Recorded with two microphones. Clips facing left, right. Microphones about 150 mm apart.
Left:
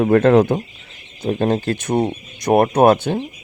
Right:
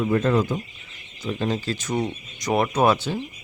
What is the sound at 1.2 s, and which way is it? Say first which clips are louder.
Speech: left 7 dB; 55° left (ahead or behind).